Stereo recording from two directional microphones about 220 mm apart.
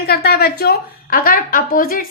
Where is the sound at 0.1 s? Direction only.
45° left (ahead or behind).